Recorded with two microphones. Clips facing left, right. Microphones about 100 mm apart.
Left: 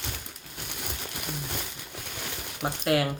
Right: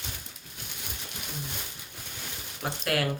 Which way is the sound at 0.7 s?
60° left (ahead or behind).